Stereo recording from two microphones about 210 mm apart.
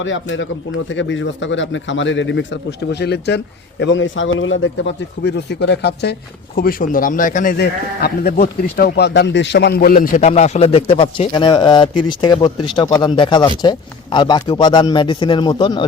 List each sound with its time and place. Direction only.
0.0 s speech: 65° left (ahead or behind); by 15.9 s 20° left (ahead or behind)